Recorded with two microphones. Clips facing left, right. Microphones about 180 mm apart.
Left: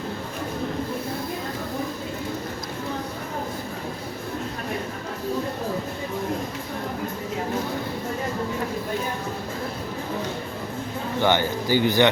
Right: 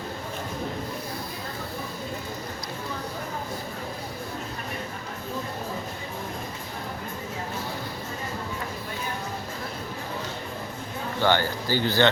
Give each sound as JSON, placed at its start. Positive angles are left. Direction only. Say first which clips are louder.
{"t": 11.2, "sound": "speech", "louder": "left 2 dB", "side_deg": 15}